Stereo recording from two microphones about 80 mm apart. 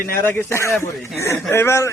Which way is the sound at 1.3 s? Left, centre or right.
Left.